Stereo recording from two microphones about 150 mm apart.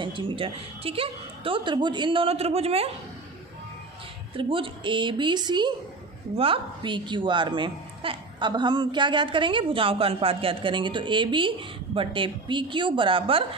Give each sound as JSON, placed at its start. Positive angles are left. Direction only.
{"t": 0.0, "sound": "a woman's voice", "side_deg": -35}
{"t": 4.4, "sound": "a woman's voice", "side_deg": -35}